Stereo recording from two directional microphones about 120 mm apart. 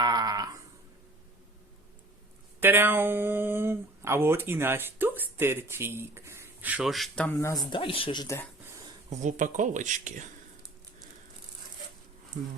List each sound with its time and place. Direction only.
0.0 s a sound: 35° right (ahead or behind)
2.6 s speech: 15° right (ahead or behind)
6.8 s speech: centre (ahead or behind)
7.3 s speech: 25° left (ahead or behind)
7.6 s speech: 45° left (ahead or behind)
9.0 s speech: 90° right